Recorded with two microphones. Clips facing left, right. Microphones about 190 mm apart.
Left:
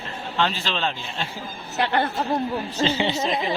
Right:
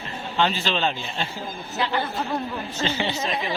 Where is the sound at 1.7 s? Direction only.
65° left (ahead or behind).